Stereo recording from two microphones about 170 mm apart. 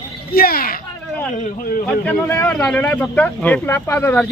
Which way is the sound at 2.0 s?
10° left (ahead or behind).